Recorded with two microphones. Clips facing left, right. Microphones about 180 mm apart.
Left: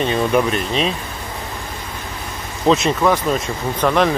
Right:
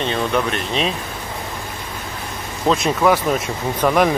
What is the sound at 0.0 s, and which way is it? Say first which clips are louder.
Speech: left 3 dB; 5° left (ahead or behind).